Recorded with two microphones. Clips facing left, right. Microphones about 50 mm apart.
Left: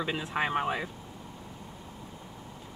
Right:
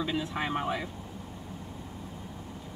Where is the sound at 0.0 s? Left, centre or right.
Left.